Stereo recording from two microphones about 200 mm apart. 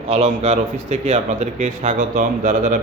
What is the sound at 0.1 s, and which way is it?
A man's voice, 35° right (ahead or behind).